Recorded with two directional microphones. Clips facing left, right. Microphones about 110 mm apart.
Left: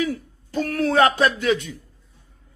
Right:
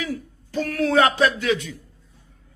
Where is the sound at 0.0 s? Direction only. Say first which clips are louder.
Left 4 dB; 35° left (ahead or behind).